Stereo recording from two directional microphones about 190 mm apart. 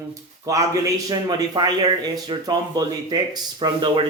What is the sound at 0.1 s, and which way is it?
Speech, 15° right (ahead or behind).